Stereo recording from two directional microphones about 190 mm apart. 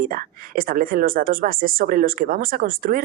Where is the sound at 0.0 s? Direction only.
50° right (ahead or behind).